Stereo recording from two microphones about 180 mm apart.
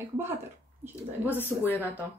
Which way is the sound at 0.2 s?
15° right (ahead or behind).